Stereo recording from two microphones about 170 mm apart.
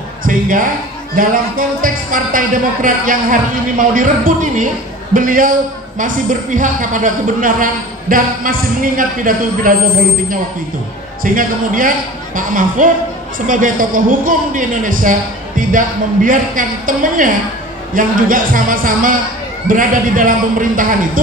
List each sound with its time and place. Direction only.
0.2 s a man's voice: 55° right (ahead or behind)
11.2 s speech: 55° right (ahead or behind)